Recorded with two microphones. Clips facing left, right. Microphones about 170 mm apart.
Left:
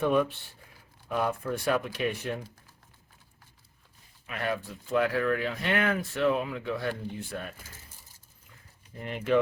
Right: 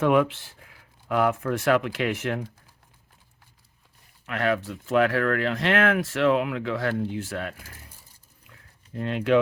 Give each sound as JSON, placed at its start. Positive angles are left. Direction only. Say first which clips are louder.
{"t": 0.0, "sound": "speech", "louder": "right 5 dB", "side_deg": -90}
{"t": 4.3, "sound": "speech", "louder": "right 7 dB", "side_deg": -75}
{"t": 9.0, "sound": "speech", "louder": "right 5 dB", "side_deg": -75}